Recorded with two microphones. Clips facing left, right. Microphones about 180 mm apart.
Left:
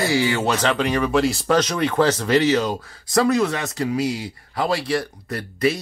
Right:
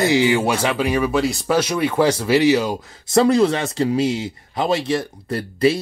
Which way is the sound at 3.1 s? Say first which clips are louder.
Right 4 dB; 30° right (ahead or behind).